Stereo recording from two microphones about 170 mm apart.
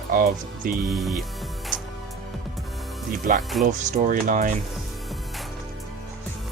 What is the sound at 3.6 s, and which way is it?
Speech, 50° right (ahead or behind).